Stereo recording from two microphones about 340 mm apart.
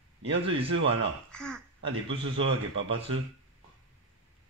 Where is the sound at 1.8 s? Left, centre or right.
Right.